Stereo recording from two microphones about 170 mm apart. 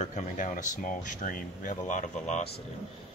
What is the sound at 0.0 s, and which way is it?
Speech, 45° left (ahead or behind).